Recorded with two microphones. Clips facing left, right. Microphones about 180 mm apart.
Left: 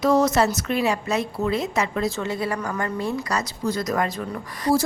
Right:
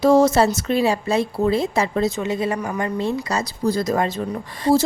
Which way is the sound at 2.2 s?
20° right (ahead or behind).